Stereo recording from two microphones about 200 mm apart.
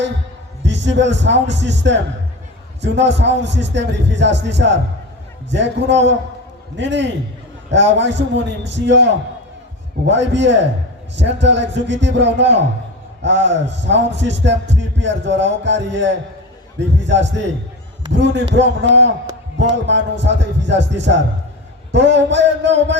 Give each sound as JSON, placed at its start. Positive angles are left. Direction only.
{"t": 0.6, "sound": "a man's voice", "side_deg": -60}